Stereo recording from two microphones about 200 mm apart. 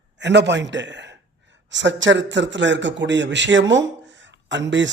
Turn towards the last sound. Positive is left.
turn(degrees=-65)  # may be behind; listen again after turning